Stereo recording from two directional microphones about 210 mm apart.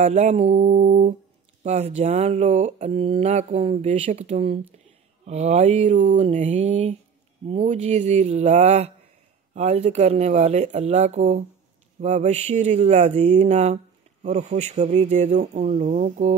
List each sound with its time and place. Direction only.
0.0 s speech: 30° right (ahead or behind)